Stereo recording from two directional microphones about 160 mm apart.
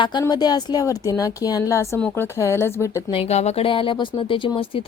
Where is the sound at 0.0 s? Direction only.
25° left (ahead or behind).